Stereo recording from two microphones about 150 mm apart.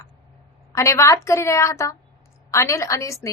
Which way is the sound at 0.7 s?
20° left (ahead or behind).